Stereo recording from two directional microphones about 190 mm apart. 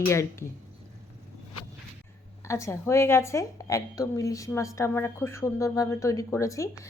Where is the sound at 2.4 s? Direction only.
15° left (ahead or behind).